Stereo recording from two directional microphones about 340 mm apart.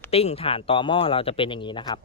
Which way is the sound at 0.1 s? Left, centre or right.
Centre.